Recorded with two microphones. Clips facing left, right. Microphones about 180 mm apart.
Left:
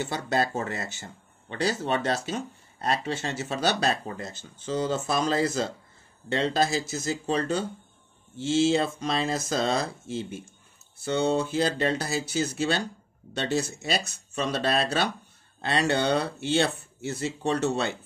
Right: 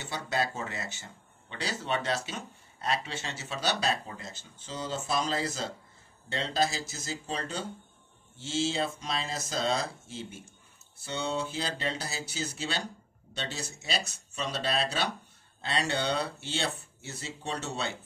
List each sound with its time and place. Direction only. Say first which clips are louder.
0.1 s speech: left 1 dB; 45° left (ahead or behind)